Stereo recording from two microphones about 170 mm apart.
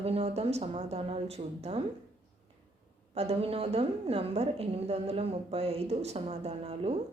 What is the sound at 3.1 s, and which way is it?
A woman's voice, 40° right (ahead or behind).